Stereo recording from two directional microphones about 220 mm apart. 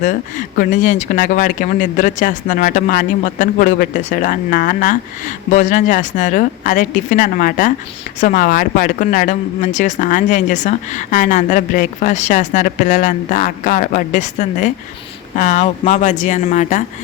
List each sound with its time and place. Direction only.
0.0 s speech: 35° left (ahead or behind)